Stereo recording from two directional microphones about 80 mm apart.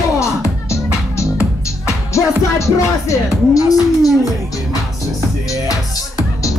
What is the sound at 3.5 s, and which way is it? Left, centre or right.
Speech, left.